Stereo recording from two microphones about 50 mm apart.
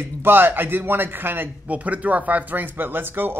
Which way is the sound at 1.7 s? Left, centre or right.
Right.